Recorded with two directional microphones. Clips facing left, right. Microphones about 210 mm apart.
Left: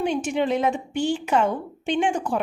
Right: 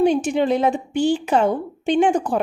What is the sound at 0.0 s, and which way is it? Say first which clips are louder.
A woman's voice: right 6 dB; 35° right (ahead or behind).